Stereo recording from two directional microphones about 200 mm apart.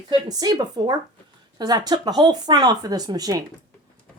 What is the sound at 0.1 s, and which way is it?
Speech, 20° right (ahead or behind).